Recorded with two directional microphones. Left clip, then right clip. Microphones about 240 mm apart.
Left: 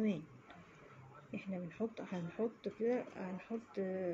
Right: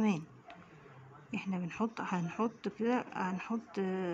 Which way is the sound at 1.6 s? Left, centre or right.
Right.